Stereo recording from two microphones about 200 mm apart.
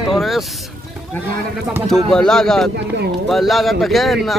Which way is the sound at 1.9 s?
5° left (ahead or behind).